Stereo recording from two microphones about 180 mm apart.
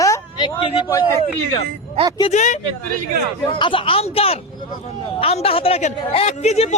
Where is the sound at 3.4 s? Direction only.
30° left (ahead or behind).